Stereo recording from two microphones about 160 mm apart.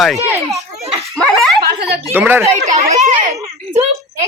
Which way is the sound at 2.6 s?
45° right (ahead or behind).